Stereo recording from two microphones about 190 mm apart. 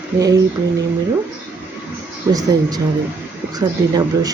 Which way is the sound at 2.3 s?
20° right (ahead or behind).